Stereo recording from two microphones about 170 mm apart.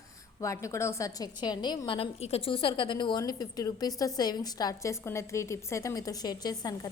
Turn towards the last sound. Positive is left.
turn(degrees=25)  # may be behind; listen again after turning